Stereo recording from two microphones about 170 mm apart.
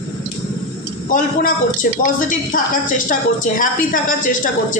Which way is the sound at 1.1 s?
55° left (ahead or behind).